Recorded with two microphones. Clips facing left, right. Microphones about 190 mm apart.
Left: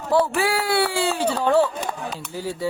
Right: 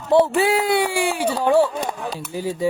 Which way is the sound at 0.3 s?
20° right (ahead or behind).